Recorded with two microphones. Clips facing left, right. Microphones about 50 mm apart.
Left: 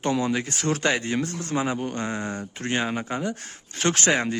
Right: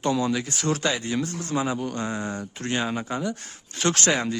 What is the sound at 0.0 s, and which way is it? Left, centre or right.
Speech, left.